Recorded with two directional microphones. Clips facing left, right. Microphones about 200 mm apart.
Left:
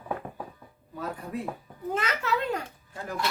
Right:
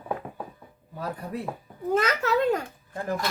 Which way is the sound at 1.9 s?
40° right (ahead or behind).